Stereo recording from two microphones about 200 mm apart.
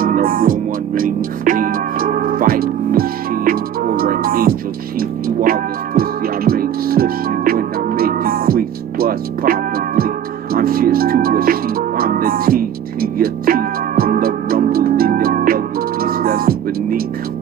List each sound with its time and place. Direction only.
0.0 s music: 45° right (ahead or behind)